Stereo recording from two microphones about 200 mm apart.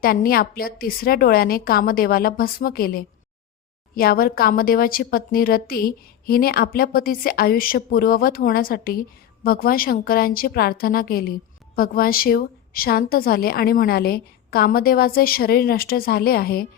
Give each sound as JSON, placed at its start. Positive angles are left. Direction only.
{"t": 0.0, "sound": "speech", "side_deg": 50}